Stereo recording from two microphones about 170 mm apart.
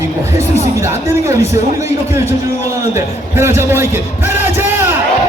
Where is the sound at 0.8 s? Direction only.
15° right (ahead or behind).